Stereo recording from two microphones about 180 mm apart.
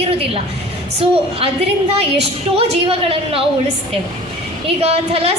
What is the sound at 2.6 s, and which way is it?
Speech, 30° right (ahead or behind).